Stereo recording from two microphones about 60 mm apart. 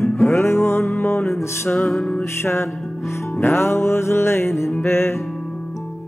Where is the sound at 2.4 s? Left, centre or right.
Left.